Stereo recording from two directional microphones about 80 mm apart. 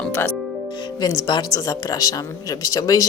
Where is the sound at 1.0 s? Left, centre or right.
Left.